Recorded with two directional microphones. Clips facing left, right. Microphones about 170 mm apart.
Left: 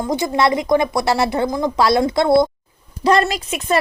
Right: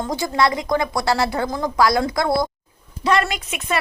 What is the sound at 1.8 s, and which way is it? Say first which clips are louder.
A woman's voice: left 2 dB; 25° left (ahead or behind).